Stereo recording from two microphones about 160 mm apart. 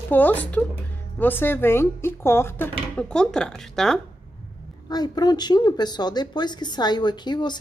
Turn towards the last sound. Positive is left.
turn(degrees=25)  # may be behind; listen again after turning